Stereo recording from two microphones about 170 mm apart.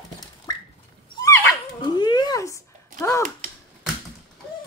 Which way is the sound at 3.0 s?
15° left (ahead or behind).